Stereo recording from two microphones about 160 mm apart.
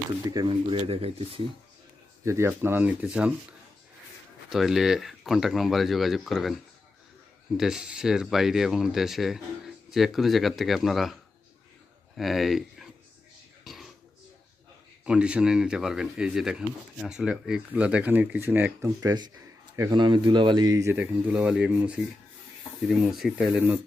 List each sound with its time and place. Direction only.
0.3 s speech: 30° right (ahead or behind)
2.2 s speech: 15° right (ahead or behind)
4.4 s speech: centre (ahead or behind)
13.7 s burping: centre (ahead or behind)
15.0 s speech: 5° right (ahead or behind)